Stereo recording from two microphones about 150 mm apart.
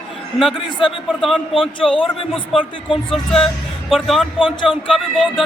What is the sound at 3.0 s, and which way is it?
Speech, 5° left (ahead or behind).